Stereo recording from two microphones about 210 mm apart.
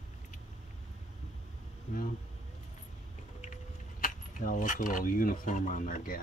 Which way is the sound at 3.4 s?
40° left (ahead or behind).